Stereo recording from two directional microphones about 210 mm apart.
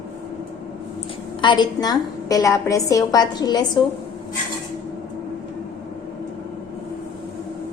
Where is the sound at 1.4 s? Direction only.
20° left (ahead or behind).